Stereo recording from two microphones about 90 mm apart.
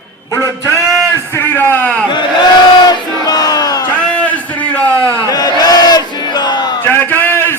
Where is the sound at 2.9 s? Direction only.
45° left (ahead or behind).